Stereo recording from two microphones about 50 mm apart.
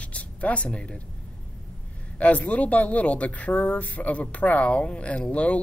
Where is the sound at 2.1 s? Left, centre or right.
Left.